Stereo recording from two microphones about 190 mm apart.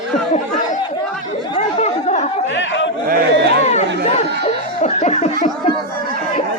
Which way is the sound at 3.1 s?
60° right (ahead or behind).